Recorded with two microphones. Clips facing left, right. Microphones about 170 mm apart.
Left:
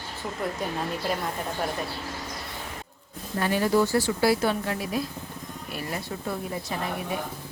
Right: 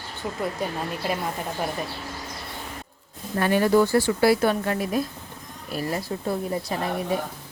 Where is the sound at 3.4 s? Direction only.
60° right (ahead or behind).